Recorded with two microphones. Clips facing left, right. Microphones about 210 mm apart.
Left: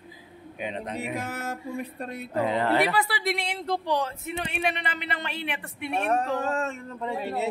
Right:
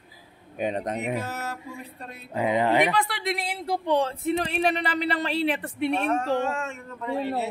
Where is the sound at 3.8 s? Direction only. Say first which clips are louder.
Right 4 dB; 25° right (ahead or behind).